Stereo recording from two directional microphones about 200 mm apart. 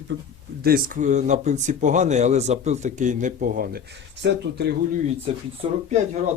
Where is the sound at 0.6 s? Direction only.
45° right (ahead or behind).